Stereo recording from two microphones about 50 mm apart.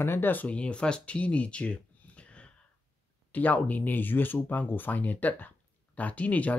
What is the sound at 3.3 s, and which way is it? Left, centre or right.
Speech, left.